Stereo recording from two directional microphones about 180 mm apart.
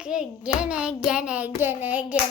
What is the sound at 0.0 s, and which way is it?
Speech, 5° right (ahead or behind).